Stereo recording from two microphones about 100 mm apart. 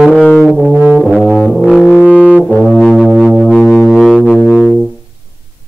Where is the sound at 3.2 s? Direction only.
5° right (ahead or behind).